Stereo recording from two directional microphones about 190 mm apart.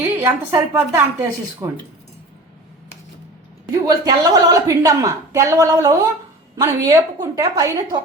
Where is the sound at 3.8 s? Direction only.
20° right (ahead or behind).